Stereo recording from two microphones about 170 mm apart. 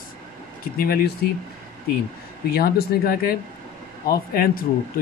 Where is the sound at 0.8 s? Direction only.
60° left (ahead or behind).